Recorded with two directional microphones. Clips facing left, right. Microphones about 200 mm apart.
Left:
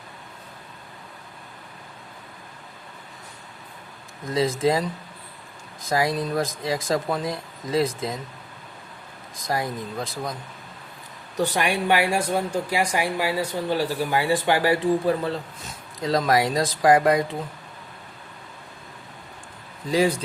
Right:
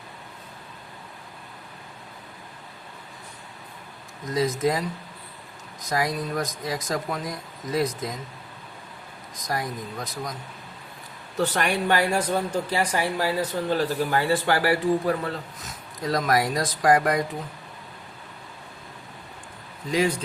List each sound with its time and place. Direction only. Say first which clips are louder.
4.3 s speech: left 2 dB; 30° left (ahead or behind)
5.8 s speech: left 3 dB; 25° left (ahead or behind)
9.3 s speech: left 3 dB; 25° left (ahead or behind)
11.3 s speech: left 1 dB; 10° left (ahead or behind)